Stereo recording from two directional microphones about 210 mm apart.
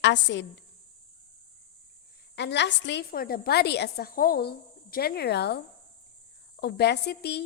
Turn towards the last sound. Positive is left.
turn(degrees=50)  # may be behind; listen again after turning